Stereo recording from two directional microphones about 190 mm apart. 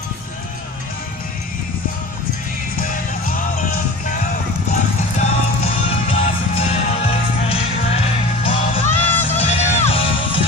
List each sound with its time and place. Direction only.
5.2 s music: 30° left (ahead or behind)